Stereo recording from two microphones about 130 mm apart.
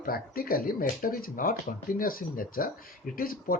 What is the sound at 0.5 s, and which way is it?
Speech, 90° left.